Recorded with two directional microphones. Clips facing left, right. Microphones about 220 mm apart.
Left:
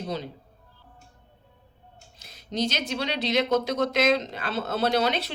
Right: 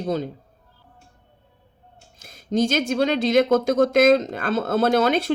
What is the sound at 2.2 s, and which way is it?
Speech, 50° right (ahead or behind).